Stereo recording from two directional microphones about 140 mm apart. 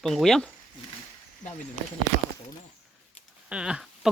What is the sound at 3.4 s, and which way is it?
Speech, 5° right (ahead or behind).